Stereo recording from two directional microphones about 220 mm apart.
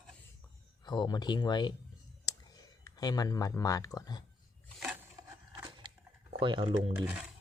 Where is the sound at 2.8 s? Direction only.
15° left (ahead or behind).